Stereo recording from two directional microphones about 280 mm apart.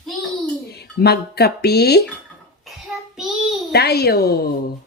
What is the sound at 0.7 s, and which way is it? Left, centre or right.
Speech, left.